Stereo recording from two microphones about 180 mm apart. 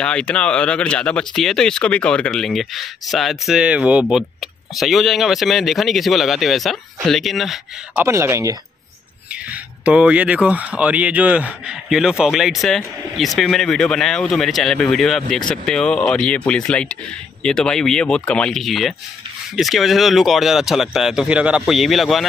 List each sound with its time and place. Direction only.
0.0 s speech: 5° left (ahead or behind)
8.0 s speech: 15° right (ahead or behind)